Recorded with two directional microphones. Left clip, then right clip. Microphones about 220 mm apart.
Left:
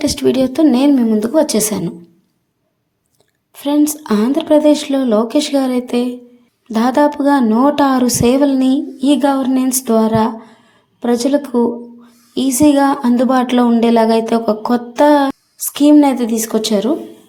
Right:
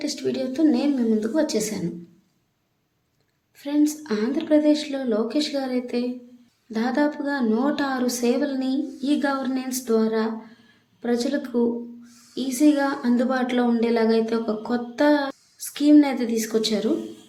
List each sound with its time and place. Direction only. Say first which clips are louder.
0.0 s speech: left 12 dB; 40° left (ahead or behind)
3.5 s speech: left 8 dB; 35° left (ahead or behind)